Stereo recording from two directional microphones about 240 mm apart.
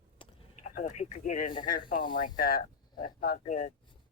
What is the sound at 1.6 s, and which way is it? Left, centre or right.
Speech, left.